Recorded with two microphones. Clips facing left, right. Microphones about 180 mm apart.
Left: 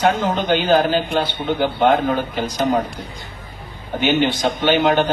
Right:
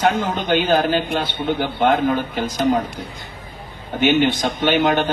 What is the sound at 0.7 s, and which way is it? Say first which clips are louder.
Speech: left 3 dB; 50° right (ahead or behind).